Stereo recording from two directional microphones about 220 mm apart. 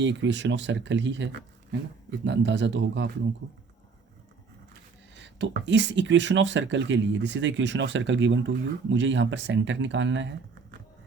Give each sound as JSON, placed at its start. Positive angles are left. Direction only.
{"t": 0.0, "sound": "speech", "side_deg": -55}
{"t": 5.1, "sound": "speech", "side_deg": -55}